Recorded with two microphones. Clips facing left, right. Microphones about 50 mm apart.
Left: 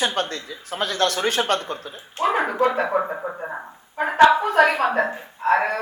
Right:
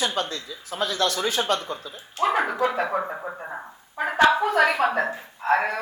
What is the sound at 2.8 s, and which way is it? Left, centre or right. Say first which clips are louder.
Speech: left 4 dB; centre.